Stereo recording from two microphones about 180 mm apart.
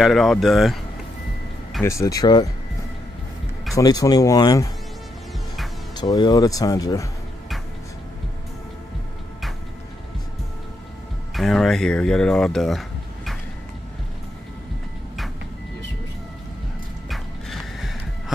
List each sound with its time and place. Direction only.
0.0 s speech: centre (ahead or behind)
1.8 s speech: 15° left (ahead or behind)
3.7 s speech: 20° left (ahead or behind)
5.9 s speech: 25° left (ahead or behind)
11.3 s speech: centre (ahead or behind)
17.1 s horse: centre (ahead or behind)